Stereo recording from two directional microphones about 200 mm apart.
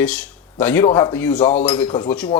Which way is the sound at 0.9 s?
20° left (ahead or behind).